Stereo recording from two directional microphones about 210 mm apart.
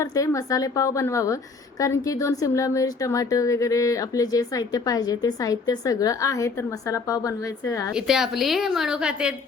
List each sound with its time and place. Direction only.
0.0 s speech: 15° left (ahead or behind)
7.9 s a woman's voice: 5° right (ahead or behind)